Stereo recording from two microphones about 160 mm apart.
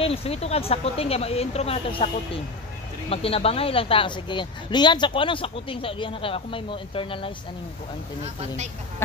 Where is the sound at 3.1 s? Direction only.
35° left (ahead or behind).